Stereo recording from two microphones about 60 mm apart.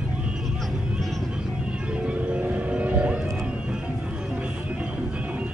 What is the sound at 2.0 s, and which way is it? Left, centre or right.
Music, right.